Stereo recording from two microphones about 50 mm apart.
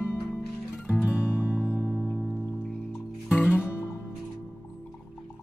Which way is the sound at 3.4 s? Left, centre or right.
Right.